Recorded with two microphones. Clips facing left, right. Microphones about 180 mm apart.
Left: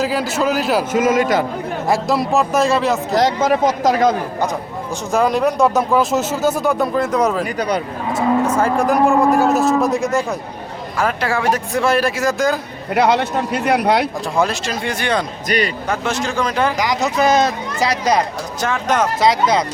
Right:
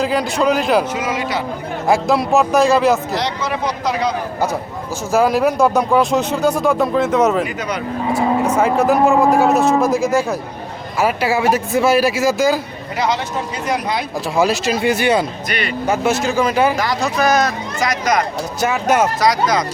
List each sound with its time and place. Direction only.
0.0 s speech: 5° left (ahead or behind)
0.9 s speech: 50° left (ahead or behind)
1.9 s speech: centre (ahead or behind)
3.2 s speech: 45° left (ahead or behind)
5.1 s speech: 5° right (ahead or behind)
7.6 s speech: 35° left (ahead or behind)
8.4 s speech: 5° right (ahead or behind)
12.9 s speech: 60° left (ahead or behind)
14.3 s speech: 5° right (ahead or behind)
15.4 s speech: 40° left (ahead or behind)
15.9 s speech: 5° right (ahead or behind)
16.7 s speech: 15° left (ahead or behind)
18.6 s speech: 10° right (ahead or behind)
19.2 s speech: 25° left (ahead or behind)